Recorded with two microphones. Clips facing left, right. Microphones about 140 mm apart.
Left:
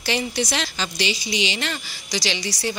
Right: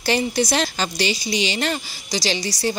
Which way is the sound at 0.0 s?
40° right (ahead or behind).